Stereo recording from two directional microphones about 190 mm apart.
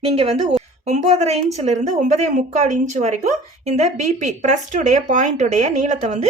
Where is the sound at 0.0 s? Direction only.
30° right (ahead or behind).